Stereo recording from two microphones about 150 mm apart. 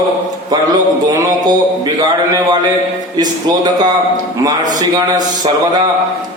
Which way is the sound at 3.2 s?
25° right (ahead or behind).